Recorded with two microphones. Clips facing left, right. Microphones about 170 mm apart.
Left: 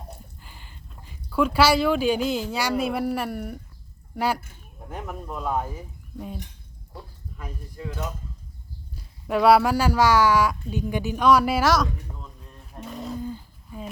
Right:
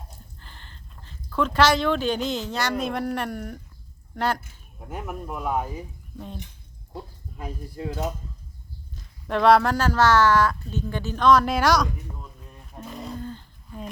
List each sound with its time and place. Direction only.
0.3 s speech: 10° left (ahead or behind)
4.9 s speech: 10° right (ahead or behind)
6.1 s speech: 10° left (ahead or behind)
7.3 s speech: 30° right (ahead or behind)
9.0 s speech: 10° left (ahead or behind)